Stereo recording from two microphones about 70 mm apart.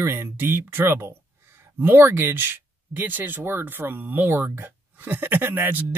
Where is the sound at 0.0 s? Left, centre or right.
Right.